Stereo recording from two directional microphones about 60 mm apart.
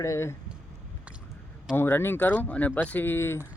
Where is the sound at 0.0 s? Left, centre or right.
Left.